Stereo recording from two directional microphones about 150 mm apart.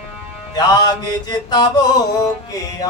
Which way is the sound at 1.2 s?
30° left (ahead or behind).